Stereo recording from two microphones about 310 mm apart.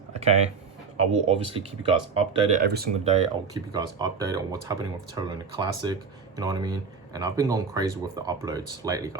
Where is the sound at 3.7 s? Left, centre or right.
Centre.